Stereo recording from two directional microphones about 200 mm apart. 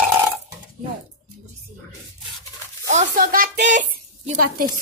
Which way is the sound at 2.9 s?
40° right (ahead or behind).